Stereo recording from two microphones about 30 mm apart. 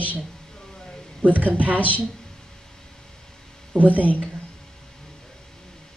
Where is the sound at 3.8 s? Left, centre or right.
Right.